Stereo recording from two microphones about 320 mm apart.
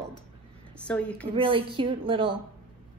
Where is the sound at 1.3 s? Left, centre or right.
Centre.